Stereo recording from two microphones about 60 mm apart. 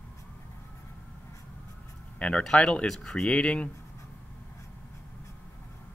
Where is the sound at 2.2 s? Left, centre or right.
Centre.